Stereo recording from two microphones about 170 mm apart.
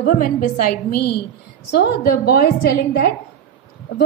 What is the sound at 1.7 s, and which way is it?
A woman's voice, 65° left (ahead or behind).